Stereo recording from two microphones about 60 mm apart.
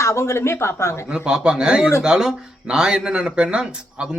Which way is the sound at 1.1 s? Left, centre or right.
Centre.